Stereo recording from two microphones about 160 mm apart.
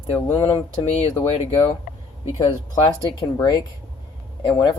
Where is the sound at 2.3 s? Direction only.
25° left (ahead or behind).